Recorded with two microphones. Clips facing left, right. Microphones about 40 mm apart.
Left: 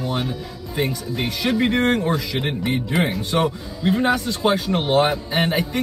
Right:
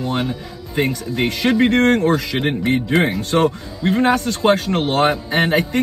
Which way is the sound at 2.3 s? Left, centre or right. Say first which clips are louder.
Right 5 dB; right.